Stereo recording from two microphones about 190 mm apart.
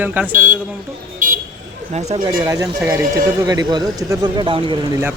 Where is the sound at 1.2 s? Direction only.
45° right (ahead or behind).